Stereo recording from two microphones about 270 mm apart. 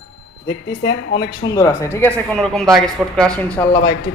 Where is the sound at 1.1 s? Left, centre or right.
Centre.